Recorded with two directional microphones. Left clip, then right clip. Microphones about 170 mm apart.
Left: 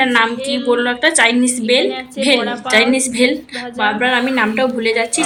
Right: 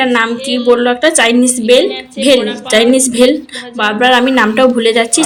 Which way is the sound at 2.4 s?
5° left (ahead or behind).